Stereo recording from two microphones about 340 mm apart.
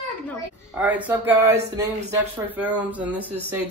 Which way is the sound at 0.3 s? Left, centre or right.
Centre.